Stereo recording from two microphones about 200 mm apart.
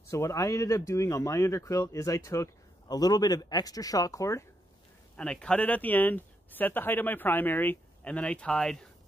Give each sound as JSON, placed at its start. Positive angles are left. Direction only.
{"t": 0.1, "sound": "speech", "side_deg": 15}
{"t": 5.1, "sound": "speech", "side_deg": 5}